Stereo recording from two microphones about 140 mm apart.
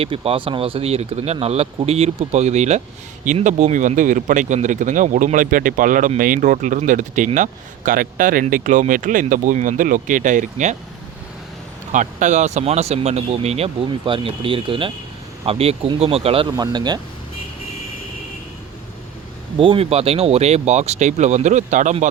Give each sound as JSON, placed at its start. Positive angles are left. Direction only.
{"t": 0.0, "sound": "speech", "side_deg": -45}
{"t": 11.9, "sound": "speech", "side_deg": -60}
{"t": 16.6, "sound": "speech", "side_deg": -30}
{"t": 19.5, "sound": "speech", "side_deg": -40}